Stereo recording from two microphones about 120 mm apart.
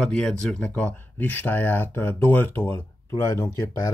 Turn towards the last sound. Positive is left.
turn(degrees=25)  # may be behind; listen again after turning